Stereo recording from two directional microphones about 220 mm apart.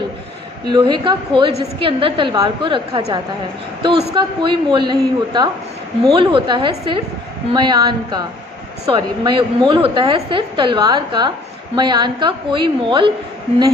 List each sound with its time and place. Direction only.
0.7 s a woman's voice: 20° right (ahead or behind)